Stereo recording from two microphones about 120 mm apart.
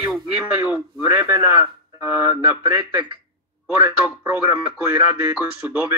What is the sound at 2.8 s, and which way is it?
Speech, 45° right (ahead or behind).